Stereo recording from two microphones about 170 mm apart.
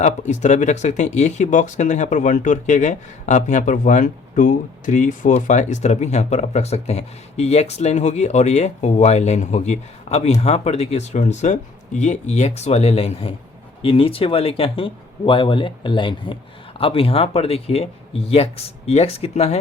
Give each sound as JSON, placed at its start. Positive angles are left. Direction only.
{"t": 0.0, "sound": "speech", "side_deg": 45}